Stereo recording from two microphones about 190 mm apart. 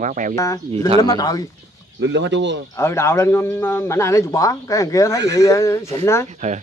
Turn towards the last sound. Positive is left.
turn(degrees=15)  # may be behind; listen again after turning